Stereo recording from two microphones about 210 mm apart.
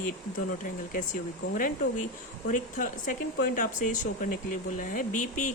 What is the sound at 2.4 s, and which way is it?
Speech, 40° left (ahead or behind).